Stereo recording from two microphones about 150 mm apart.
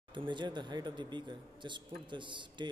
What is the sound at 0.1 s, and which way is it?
Speech, 30° right (ahead or behind).